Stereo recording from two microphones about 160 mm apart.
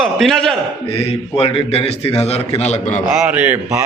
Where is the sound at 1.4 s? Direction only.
40° left (ahead or behind).